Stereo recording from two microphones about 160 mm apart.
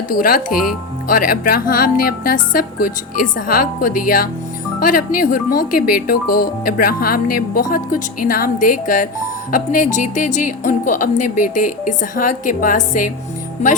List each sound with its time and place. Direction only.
0.1 s a woman's voice: 65° left (ahead or behind)